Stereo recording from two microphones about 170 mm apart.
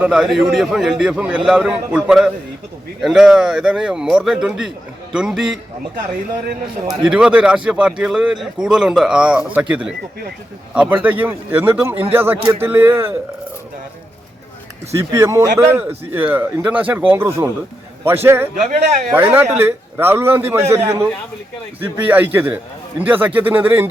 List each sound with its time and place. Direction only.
0.0 s a man's voice: 5° right (ahead or behind)
6.8 s a man's voice: 5° right (ahead or behind)
14.9 s a man's voice: 15° right (ahead or behind)